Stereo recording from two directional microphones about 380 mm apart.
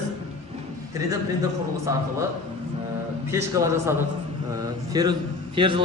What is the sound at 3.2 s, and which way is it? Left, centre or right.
Speech, centre.